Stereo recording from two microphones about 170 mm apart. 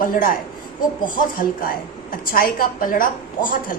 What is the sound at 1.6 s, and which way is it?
A woman's voice, 55° left (ahead or behind).